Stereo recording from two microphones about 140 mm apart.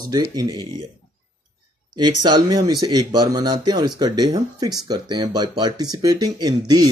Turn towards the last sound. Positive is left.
turn(degrees=-30)  # may be behind; listen again after turning